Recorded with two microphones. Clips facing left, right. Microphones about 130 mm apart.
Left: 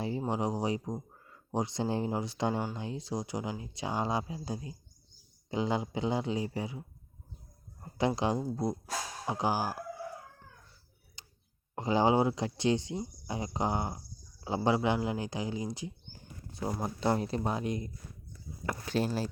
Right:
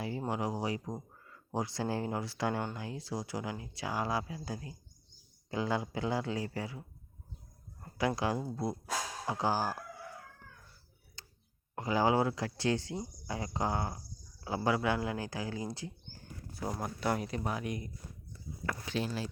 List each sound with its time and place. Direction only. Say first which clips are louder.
0.3 s speech: left 2 dB; 20° left (ahead or behind)
11.2 s a sound: right 1 dB; 15° left (ahead or behind)
11.7 s speech: left 3 dB; 25° left (ahead or behind)
18.9 s speech: left 6 dB; 45° left (ahead or behind)